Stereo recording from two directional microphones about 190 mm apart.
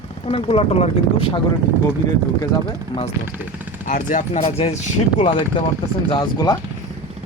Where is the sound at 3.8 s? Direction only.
40° left (ahead or behind).